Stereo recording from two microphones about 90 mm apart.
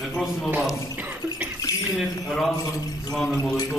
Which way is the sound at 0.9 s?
20° right (ahead or behind).